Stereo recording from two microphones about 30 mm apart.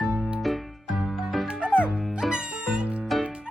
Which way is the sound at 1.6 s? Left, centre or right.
Right.